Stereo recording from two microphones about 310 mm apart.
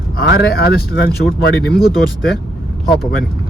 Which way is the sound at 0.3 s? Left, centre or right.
Left.